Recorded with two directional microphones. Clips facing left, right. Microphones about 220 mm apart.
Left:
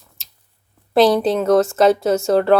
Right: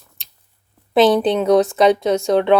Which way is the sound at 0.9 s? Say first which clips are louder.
Even; centre (ahead or behind).